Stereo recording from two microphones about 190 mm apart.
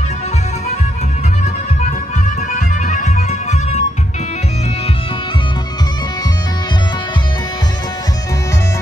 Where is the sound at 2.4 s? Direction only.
40° left (ahead or behind).